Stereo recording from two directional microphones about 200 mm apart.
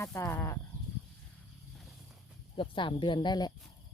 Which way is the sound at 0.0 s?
15° left (ahead or behind).